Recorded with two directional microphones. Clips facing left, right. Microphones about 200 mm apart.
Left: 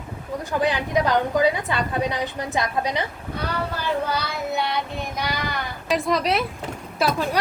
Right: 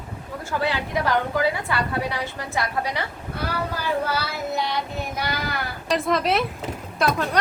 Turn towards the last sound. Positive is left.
turn(degrees=5)  # may be behind; listen again after turning